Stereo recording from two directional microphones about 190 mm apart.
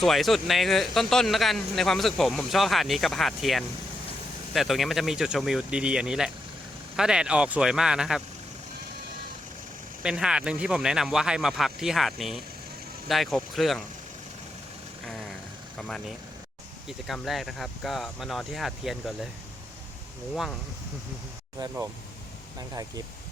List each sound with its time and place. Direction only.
0.0 s speech: centre (ahead or behind)
10.0 s speech: 5° right (ahead or behind)
15.8 s speech: 5° left (ahead or behind)
20.3 s speech: centre (ahead or behind)
22.7 s speech: 20° right (ahead or behind)